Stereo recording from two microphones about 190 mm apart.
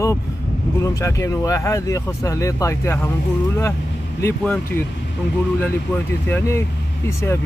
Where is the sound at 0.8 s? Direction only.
15° left (ahead or behind).